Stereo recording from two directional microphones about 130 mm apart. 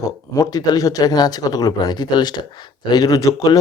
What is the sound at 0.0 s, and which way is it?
Speech, 25° left (ahead or behind).